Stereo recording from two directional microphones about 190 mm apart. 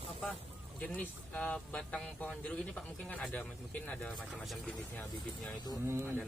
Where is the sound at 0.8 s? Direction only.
10° left (ahead or behind).